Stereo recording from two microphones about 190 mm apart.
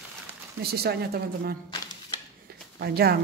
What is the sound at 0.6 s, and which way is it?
Speech, 55° right (ahead or behind).